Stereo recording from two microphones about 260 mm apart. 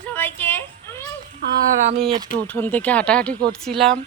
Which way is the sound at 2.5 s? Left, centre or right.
Centre.